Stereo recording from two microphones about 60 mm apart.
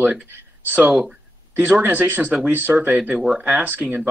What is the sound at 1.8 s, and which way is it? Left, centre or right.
Speech, right.